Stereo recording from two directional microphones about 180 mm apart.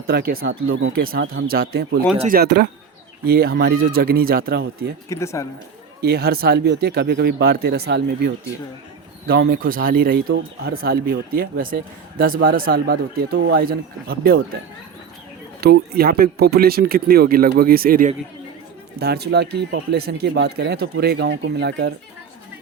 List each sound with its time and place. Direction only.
0.1 s speech: 60° right (ahead or behind); by 1.0 s 90° right
1.5 s speech: 60° right (ahead or behind)
5.0 s speech: 15° left (ahead or behind)
6.0 s speech: 60° right (ahead or behind)
9.2 s speech: 60° right (ahead or behind)
15.6 s speech: 60° right (ahead or behind)